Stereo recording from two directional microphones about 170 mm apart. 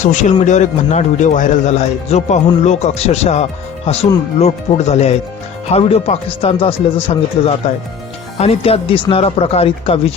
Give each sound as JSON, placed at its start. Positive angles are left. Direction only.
{"t": 0.0, "sound": "speech", "side_deg": 45}